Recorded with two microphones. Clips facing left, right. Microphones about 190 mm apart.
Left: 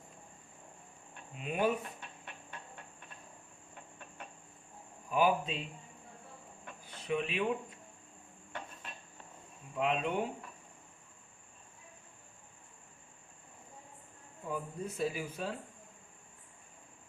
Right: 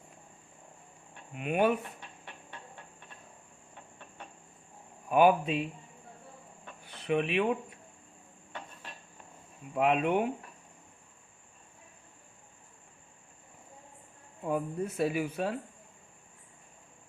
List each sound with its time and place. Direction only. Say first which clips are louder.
1.3 s speech: right 5 dB; 65° right (ahead or behind)
5.0 s speech: right 6 dB; 65° right (ahead or behind)
6.8 s speech: right 5 dB; 65° right (ahead or behind)
9.7 s speech: right 6 dB; 60° right (ahead or behind)
14.4 s speech: right 7 dB; 65° right (ahead or behind)